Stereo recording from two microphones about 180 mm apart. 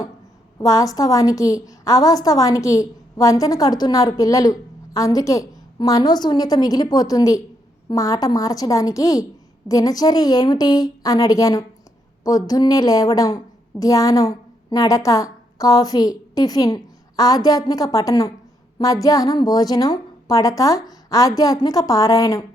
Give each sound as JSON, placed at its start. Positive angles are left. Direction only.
{"t": 0.6, "sound": "a woman's voice", "side_deg": 20}